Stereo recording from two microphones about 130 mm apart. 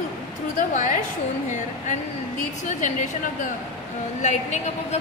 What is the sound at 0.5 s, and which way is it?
Speech, 75° left (ahead or behind).